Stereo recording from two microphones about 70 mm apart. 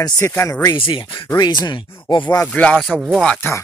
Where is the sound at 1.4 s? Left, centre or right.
Left.